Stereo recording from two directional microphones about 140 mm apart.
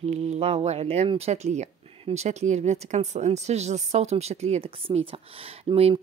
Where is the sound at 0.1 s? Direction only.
50° right (ahead or behind).